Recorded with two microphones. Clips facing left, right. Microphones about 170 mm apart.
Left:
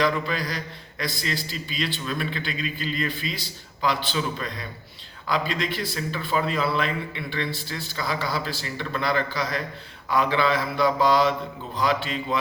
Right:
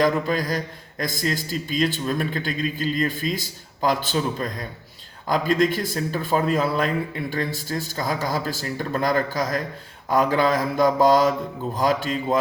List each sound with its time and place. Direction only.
0.0 s a man's voice: 45° right (ahead or behind)